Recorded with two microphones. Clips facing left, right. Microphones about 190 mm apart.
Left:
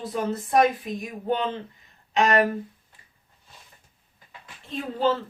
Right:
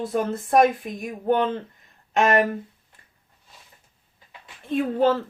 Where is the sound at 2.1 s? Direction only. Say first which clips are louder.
Right 2 dB; 50° right (ahead or behind).